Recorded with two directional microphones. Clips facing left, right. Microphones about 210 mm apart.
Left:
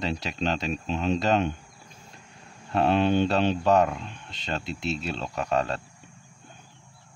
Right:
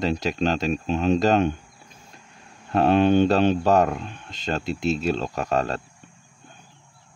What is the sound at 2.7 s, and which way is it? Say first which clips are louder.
Speech: right 4 dB; 45° right (ahead or behind).